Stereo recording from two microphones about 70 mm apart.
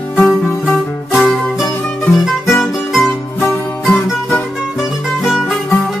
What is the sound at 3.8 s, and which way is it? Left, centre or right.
Music, centre.